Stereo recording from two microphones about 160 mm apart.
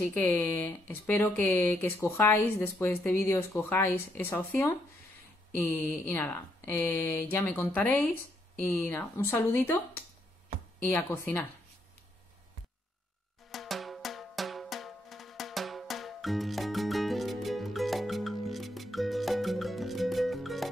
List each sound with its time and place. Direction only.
0.0 s speech: 10° left (ahead or behind)
13.5 s drum: centre (ahead or behind)